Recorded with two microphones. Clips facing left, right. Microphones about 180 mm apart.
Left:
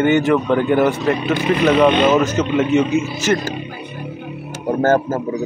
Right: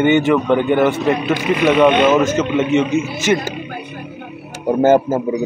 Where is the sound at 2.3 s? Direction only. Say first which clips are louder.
Even; 5° right (ahead or behind).